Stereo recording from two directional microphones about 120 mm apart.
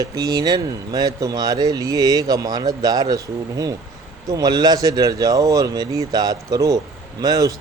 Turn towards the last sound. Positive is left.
turn(degrees=-30)  # may be behind; listen again after turning